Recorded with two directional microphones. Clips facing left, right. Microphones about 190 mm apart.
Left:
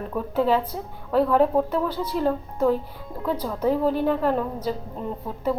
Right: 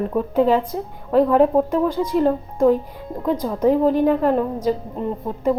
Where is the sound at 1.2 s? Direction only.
10° right (ahead or behind).